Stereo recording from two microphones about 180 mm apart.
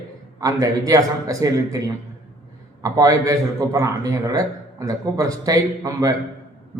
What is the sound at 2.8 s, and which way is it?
A man's voice, 20° right (ahead or behind).